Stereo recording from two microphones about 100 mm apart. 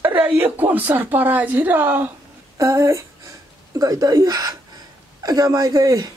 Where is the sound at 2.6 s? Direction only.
30° right (ahead or behind).